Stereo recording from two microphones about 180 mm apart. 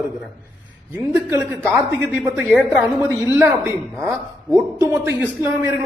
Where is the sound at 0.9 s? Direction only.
10° right (ahead or behind).